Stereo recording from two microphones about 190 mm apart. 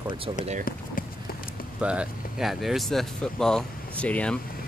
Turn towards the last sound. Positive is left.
turn(degrees=5)  # may be behind; listen again after turning